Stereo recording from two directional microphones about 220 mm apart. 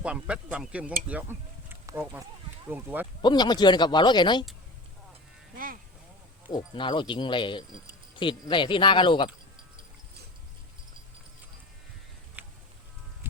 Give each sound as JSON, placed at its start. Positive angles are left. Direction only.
{"t": 0.0, "sound": "speech", "side_deg": -5}
{"t": 3.2, "sound": "speech", "side_deg": 20}
{"t": 6.5, "sound": "speech", "side_deg": 20}
{"t": 12.4, "sound": "a sound", "side_deg": -10}